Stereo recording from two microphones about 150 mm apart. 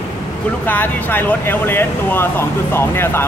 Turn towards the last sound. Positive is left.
turn(degrees=15)  # may be behind; listen again after turning